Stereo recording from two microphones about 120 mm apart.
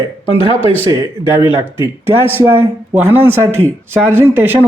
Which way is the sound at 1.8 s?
20° right (ahead or behind).